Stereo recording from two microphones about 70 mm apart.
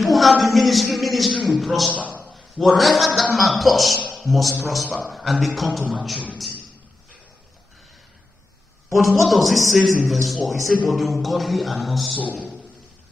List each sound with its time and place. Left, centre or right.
0.0 s speech: centre
1.9 s a man's voice: right
2.2 s a sound: centre
3.2 s a man's voice: centre
8.9 s a man's voice: centre